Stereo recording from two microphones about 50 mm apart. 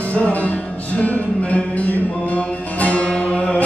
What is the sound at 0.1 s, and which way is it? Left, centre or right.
Music, left.